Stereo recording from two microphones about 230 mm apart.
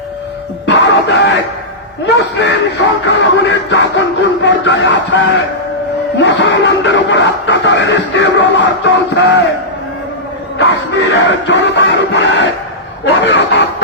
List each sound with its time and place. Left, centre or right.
0.7 s music: left
6.1 s chuckle: left
10.6 s music: left
13.1 s a sound: left